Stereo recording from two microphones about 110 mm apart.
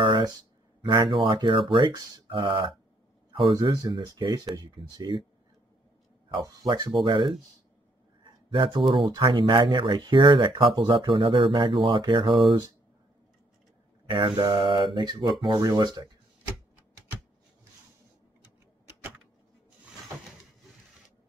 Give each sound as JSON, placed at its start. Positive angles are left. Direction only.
{"t": 0.0, "sound": "a sound", "side_deg": -45}
{"t": 0.8, "sound": "speech", "side_deg": -50}
{"t": 3.6, "sound": "mantra", "side_deg": -35}
{"t": 3.9, "sound": "speech", "side_deg": -45}
{"t": 4.8, "sound": "mantra", "side_deg": -40}
{"t": 6.7, "sound": "speech", "side_deg": -40}
{"t": 14.0, "sound": "mantra", "side_deg": -45}